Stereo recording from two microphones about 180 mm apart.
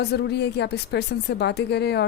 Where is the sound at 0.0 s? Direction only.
65° left (ahead or behind).